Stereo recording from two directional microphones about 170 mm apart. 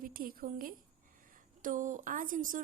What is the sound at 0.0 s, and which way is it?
A woman's voice, 60° right (ahead or behind).